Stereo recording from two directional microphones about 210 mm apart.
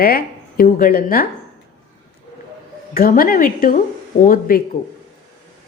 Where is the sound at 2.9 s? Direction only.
45° left (ahead or behind).